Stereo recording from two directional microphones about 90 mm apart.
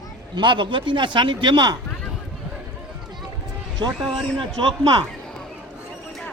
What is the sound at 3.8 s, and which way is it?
Speech, 70° right (ahead or behind).